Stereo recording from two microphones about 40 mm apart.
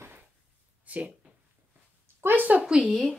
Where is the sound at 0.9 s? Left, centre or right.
Right.